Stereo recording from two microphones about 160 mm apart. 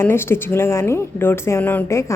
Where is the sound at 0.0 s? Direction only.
15° left (ahead or behind).